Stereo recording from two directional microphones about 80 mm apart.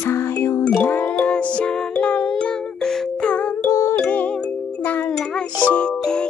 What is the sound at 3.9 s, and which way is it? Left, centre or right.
Music, left.